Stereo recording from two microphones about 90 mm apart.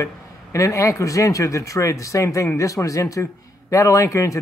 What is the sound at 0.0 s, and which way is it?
Speech, 35° left (ahead or behind).